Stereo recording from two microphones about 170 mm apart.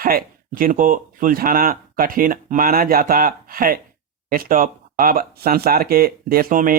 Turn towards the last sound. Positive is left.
turn(degrees=-55)  # may be behind; listen again after turning